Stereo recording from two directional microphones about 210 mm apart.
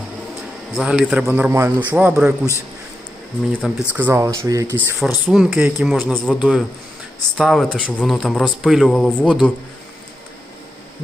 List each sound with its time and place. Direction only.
0.7 s speech: 5° right (ahead or behind)
3.5 s speech: 5° left (ahead or behind)
3.9 s speech: 10° right (ahead or behind)